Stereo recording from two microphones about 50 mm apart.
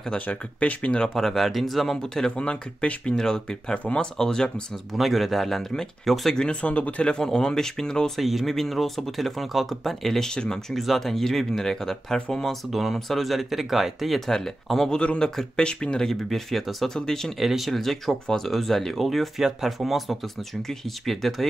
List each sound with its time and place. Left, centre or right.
0.3 s speech: left
1.0 s speech: centre
2.0 s speech: centre
3.2 s speech: centre
4.9 s speech: centre
6.3 s speech: centre
7.1 s speech: centre
8.2 s speech: centre
10.3 s speech: centre
10.7 s speech: centre
15.0 s speech: centre
16.1 s speech: centre
17.4 s speech: centre